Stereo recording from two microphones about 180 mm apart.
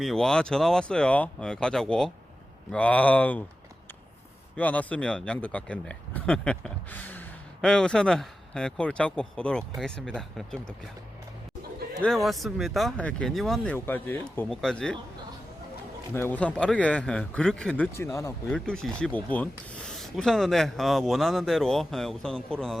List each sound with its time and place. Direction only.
0.0 s speech: centre (ahead or behind)
4.5 s speech: 10° left (ahead or behind)
12.0 s speech: centre (ahead or behind)
16.1 s speech: 10° left (ahead or behind)
17.9 s speech: 15° left (ahead or behind)
18.5 s speech: 5° left (ahead or behind)